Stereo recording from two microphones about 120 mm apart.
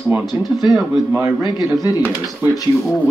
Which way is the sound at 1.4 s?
35° left (ahead or behind).